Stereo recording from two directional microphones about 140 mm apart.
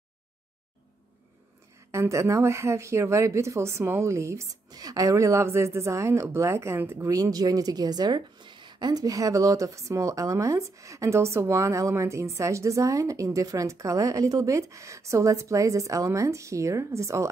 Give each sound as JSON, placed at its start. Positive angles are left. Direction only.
{"t": 1.9, "sound": "speech", "side_deg": -20}